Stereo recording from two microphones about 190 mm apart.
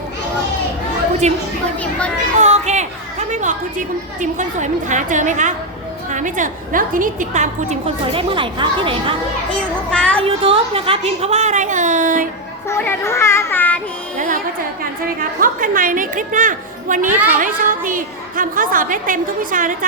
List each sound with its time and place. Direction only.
1.2 s a woman's voice: 35° right (ahead or behind)
1.8 s children playing: 5° left (ahead or behind)
2.4 s a sound: 35° right (ahead or behind)
6.1 s a woman's voice: 40° right (ahead or behind)
9.5 s a child's voice: 5° left (ahead or behind)
10.2 s a woman's voice: 30° right (ahead or behind)
12.6 s child singing: 15° left (ahead or behind)
15.0 s a woman's voice: 45° right (ahead or behind)
17.1 s a woman's voice: 10° right (ahead or behind)
17.3 s a woman's voice: 45° right (ahead or behind)